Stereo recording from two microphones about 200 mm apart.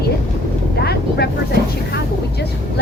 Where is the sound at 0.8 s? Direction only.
55° left (ahead or behind).